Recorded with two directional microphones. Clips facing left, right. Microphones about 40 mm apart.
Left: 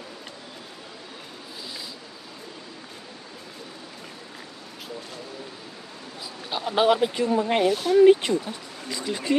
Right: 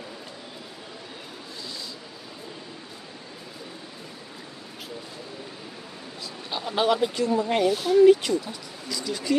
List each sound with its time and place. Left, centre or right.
6.5 s speech: centre; by 7.7 s left
7.7 s speech: centre
8.0 s speech: left